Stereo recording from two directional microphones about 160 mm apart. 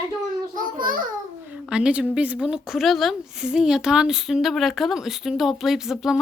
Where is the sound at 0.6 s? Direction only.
60° right (ahead or behind).